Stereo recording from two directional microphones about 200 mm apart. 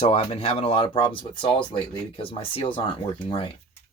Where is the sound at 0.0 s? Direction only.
30° left (ahead or behind).